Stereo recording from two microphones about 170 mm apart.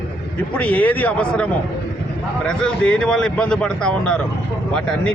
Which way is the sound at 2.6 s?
5° left (ahead or behind).